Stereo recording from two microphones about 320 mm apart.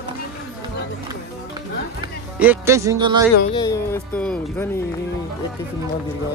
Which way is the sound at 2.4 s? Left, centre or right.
Centre.